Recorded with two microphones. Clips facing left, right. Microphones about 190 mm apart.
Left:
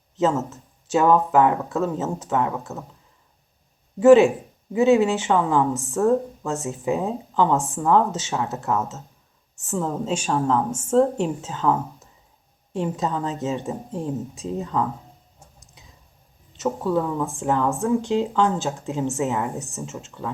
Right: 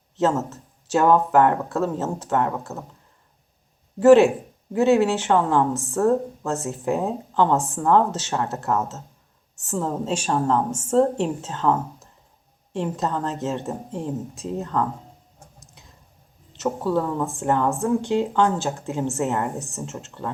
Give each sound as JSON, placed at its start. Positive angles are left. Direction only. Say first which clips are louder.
{"t": 0.2, "sound": "speech", "louder": "even", "side_deg": 0}
{"t": 4.0, "sound": "speech", "louder": "even", "side_deg": 0}
{"t": 16.6, "sound": "speech", "louder": "even", "side_deg": 0}